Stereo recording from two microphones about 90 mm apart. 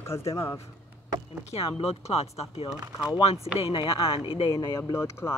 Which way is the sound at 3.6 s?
90° left.